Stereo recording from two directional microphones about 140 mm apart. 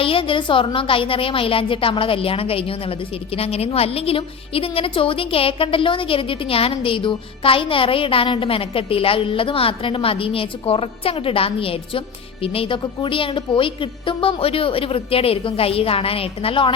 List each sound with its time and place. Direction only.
0.0 s a woman's voice: 40° left (ahead or behind)